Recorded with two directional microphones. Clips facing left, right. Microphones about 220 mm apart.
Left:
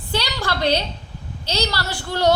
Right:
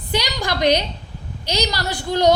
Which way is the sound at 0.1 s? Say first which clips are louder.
Right 2 dB; 15° right (ahead or behind).